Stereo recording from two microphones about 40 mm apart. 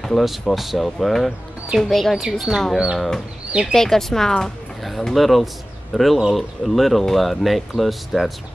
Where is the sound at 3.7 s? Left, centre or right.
Centre.